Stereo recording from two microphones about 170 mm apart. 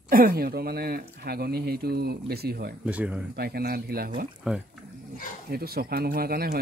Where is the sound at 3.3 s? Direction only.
65° right (ahead or behind).